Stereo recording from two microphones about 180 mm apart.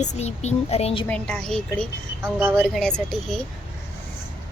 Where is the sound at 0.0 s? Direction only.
40° left (ahead or behind).